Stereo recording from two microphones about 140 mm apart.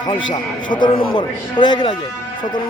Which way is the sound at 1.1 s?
30° left (ahead or behind).